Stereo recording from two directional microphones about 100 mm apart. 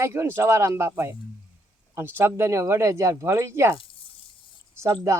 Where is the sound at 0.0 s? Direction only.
25° right (ahead or behind).